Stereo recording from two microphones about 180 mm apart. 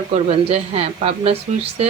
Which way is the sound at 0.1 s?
35° right (ahead or behind).